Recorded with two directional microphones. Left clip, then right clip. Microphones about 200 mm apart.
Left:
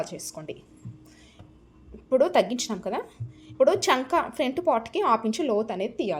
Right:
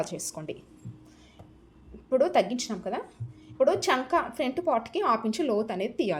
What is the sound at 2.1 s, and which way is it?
A woman's voice, 20° left (ahead or behind).